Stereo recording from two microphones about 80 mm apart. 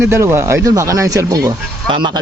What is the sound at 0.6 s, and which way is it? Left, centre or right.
Speech, right.